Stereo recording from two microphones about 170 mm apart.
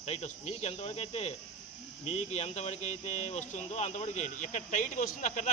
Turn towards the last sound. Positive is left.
turn(degrees=50)  # may be behind; listen again after turning